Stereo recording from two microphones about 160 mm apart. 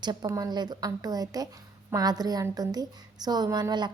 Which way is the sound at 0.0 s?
25° right (ahead or behind).